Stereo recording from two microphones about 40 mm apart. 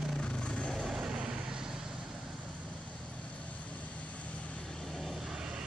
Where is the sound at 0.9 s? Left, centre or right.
Right.